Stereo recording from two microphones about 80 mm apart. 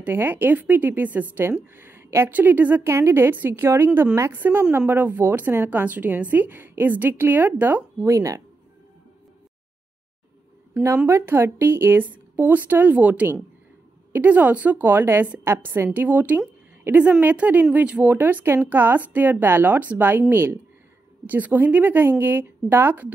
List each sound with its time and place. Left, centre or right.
0.0 s a woman's voice: right
2.9 s a woman's voice: right
8.0 s speech: right
11.1 s a woman's voice: right